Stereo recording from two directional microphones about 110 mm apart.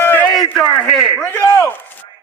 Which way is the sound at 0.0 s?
15° left (ahead or behind).